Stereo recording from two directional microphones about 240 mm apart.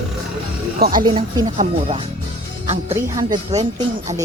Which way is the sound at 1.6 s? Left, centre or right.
Right.